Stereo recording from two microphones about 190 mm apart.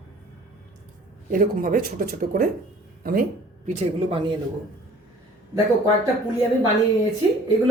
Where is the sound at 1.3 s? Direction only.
45° right (ahead or behind).